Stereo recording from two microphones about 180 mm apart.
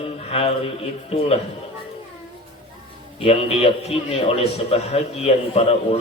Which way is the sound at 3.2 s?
35° left (ahead or behind).